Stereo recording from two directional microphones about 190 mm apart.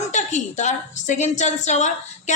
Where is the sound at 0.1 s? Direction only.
40° left (ahead or behind).